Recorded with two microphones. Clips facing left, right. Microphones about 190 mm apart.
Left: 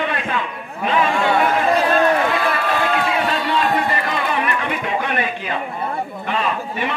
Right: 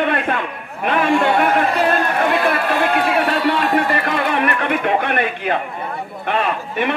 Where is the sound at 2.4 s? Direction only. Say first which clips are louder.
Right 2 dB; 60° right (ahead or behind).